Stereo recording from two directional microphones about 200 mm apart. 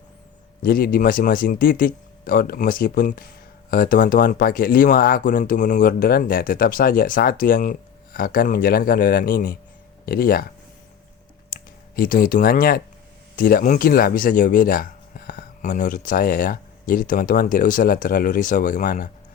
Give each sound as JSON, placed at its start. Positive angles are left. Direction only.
{"t": 0.6, "sound": "speech", "side_deg": 50}
{"t": 11.5, "sound": "speech", "side_deg": 45}